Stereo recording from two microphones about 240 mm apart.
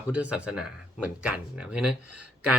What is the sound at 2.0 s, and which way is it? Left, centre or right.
Speech, right.